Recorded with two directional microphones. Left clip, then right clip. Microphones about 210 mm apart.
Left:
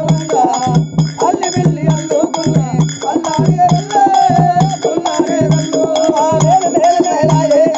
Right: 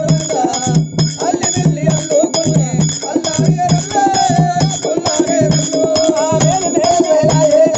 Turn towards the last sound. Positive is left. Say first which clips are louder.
# even
turn(degrees=-20)  # may be behind; listen again after turning